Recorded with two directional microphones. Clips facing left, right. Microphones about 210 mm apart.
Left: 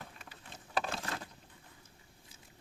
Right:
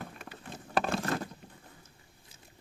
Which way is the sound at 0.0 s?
60° right (ahead or behind).